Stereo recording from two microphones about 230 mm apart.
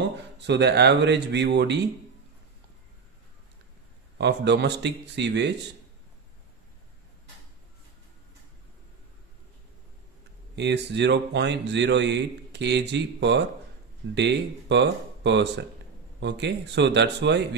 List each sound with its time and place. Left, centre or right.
0.5 s a man's voice: right
4.2 s a man's voice: right
10.5 s a man's voice: right